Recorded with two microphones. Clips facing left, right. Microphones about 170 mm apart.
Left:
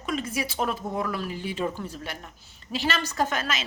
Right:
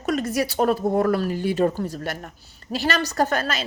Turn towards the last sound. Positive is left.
turn(degrees=-35)  # may be behind; listen again after turning